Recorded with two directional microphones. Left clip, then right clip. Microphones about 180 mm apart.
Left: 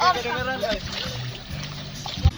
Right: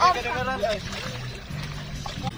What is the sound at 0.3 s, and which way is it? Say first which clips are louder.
Speech: even; 5° left (ahead or behind).